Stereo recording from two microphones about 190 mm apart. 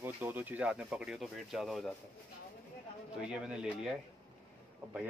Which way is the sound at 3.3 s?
5° right (ahead or behind).